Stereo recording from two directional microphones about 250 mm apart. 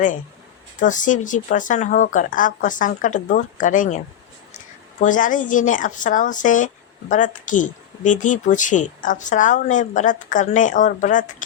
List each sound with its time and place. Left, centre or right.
0.8 s speech: left